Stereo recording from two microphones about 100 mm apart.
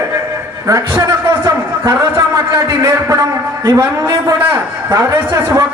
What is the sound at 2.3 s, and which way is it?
A man's voice, 35° right (ahead or behind).